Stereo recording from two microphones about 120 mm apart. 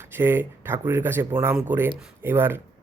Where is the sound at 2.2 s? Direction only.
20° right (ahead or behind).